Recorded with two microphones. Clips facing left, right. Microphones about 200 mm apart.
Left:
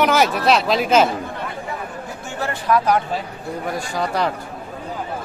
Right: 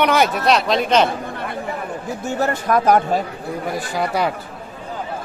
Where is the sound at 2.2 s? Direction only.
40° right (ahead or behind).